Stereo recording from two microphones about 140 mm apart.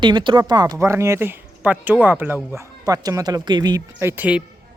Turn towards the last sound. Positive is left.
turn(degrees=-10)  # may be behind; listen again after turning